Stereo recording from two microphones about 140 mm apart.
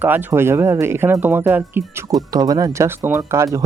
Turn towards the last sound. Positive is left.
turn(degrees=-20)  # may be behind; listen again after turning